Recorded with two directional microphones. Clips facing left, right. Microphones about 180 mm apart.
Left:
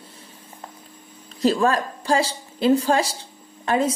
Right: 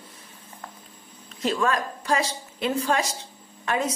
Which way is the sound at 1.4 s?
35° left (ahead or behind).